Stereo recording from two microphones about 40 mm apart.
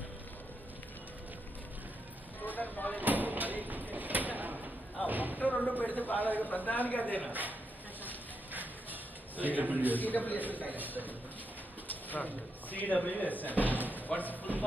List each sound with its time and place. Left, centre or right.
2.5 s vehicle: left
3.0 s a sound: right
5.7 s a sound: left
6.4 s a woman's voice: left
9.4 s a man's voice: right
9.9 s a woman's voice: left
11.9 s pigeon: left
12.7 s a woman's voice: left
13.9 s slam: left